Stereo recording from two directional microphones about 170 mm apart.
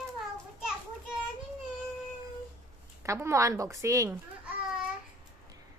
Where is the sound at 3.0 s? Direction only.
15° right (ahead or behind).